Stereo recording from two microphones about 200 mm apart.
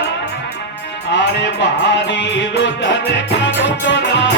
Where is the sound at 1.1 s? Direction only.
60° left (ahead or behind).